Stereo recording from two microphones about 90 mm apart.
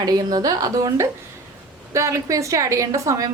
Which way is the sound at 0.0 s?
50° right (ahead or behind).